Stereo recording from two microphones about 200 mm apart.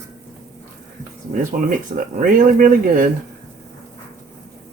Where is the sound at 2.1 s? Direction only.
40° right (ahead or behind).